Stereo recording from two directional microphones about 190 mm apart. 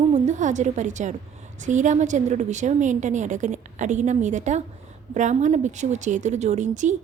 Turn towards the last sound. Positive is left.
turn(degrees=-40)  # may be behind; listen again after turning